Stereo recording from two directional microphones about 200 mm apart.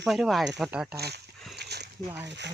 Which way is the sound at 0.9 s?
55° right (ahead or behind).